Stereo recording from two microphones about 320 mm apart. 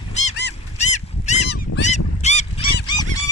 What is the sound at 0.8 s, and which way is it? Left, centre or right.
Goose, left.